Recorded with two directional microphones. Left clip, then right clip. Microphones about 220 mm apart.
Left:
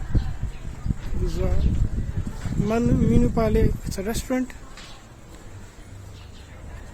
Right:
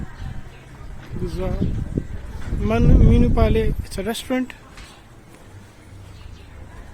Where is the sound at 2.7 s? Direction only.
Centre (ahead or behind).